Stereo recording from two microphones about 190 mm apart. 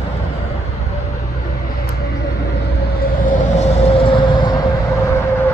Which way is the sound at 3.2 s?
35° left (ahead or behind).